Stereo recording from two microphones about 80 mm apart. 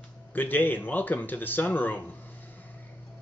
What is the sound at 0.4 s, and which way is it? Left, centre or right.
Speech, left.